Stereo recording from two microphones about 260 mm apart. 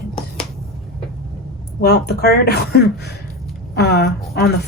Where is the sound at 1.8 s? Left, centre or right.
Left.